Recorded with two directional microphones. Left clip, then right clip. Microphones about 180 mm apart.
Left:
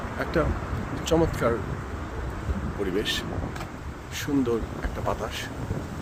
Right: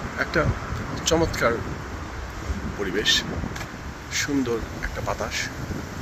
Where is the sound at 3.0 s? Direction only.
10° left (ahead or behind).